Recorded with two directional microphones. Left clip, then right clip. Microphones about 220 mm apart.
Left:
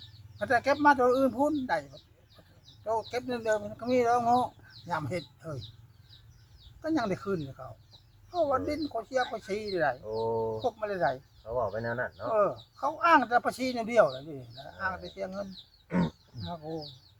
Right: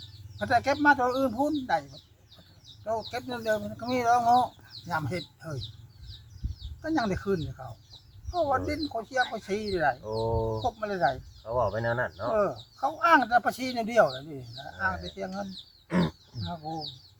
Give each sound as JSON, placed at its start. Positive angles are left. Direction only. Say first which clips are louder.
{"t": 0.3, "sound": "speech", "louder": "right 1 dB", "side_deg": 15}
{"t": 6.8, "sound": "speech", "louder": "right 2 dB", "side_deg": 15}
{"t": 10.0, "sound": "speech", "louder": "right 1 dB", "side_deg": -50}
{"t": 10.6, "sound": "speech", "louder": "right 2 dB", "side_deg": 10}
{"t": 11.4, "sound": "speech", "louder": "right 4 dB", "side_deg": -50}
{"t": 12.3, "sound": "speech", "louder": "left 2 dB", "side_deg": 10}
{"t": 15.9, "sound": "speech", "louder": "right 3 dB", "side_deg": -45}